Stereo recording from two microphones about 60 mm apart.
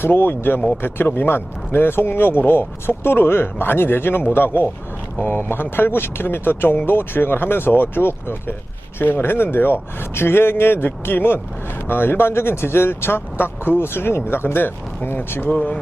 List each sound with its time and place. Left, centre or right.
0.0 s speech: left
15.4 s speech: left